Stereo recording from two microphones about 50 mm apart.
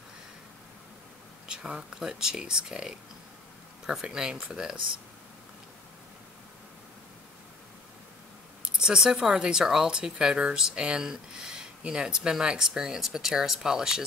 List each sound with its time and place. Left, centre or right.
1.5 s speech: centre
8.6 s speech: centre